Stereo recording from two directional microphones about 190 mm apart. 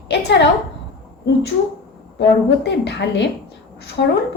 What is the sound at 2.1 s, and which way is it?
A woman's voice, 65° left (ahead or behind).